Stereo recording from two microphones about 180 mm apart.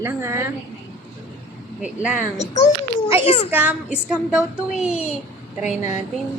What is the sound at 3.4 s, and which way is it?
A woman's voice, 10° right (ahead or behind).